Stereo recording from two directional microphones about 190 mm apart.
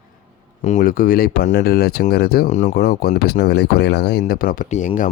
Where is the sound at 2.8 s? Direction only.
55° left (ahead or behind).